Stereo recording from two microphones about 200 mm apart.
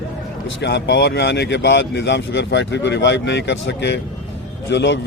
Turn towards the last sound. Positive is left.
turn(degrees=60)  # may be behind; listen again after turning